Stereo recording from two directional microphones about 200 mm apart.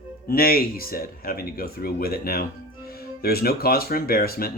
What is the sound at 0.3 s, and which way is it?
Speech, 50° left (ahead or behind).